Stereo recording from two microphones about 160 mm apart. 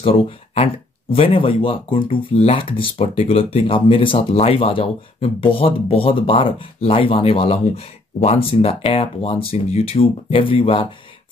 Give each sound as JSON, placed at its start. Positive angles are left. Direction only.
{"t": 0.0, "sound": "speech", "side_deg": 40}